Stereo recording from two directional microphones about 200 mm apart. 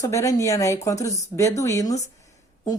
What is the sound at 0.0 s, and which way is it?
Speech, 15° left (ahead or behind).